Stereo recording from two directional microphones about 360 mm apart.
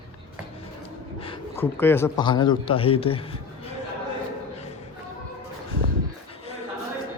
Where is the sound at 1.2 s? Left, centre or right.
Centre.